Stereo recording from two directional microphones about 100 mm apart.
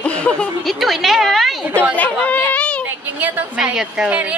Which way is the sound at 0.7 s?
Centre (ahead or behind).